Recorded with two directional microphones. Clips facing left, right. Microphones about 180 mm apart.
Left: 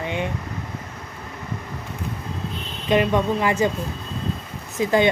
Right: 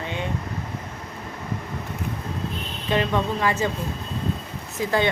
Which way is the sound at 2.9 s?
15° left (ahead or behind).